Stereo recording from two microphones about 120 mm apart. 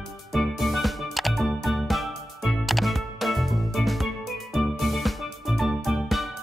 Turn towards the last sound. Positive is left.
turn(degrees=0)  # may be behind; listen again after turning